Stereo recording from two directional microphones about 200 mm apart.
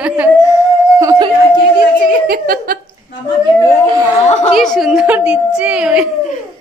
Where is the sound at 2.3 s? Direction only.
45° right (ahead or behind).